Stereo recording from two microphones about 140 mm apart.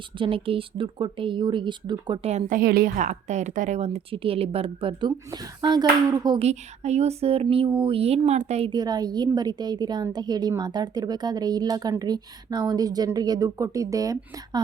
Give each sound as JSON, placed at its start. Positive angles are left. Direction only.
{"t": 0.2, "sound": "speech", "side_deg": -40}
{"t": 2.5, "sound": "a woman's voice", "side_deg": -90}
{"t": 6.4, "sound": "a woman's voice", "side_deg": -50}
{"t": 8.7, "sound": "speech", "side_deg": -30}